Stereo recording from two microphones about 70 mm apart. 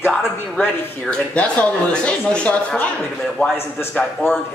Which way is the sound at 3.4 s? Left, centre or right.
Left.